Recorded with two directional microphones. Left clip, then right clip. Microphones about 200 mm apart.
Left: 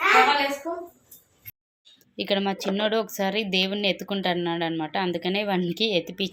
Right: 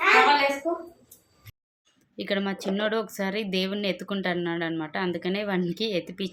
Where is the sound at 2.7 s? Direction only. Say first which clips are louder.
Left 1 dB; 5° left (ahead or behind).